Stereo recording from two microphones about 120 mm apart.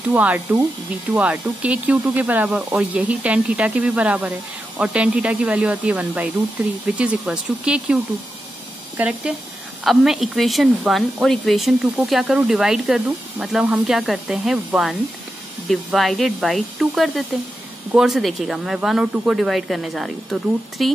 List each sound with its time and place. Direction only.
0.1 s speech: 15° right (ahead or behind)